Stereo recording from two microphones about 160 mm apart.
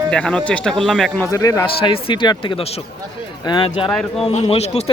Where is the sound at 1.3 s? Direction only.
20° left (ahead or behind).